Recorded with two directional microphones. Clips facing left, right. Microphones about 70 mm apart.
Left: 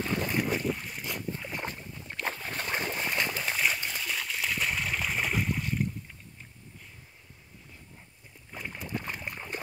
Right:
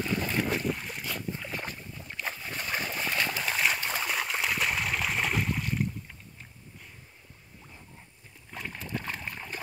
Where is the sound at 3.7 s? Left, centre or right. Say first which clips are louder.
Right 3 dB; right.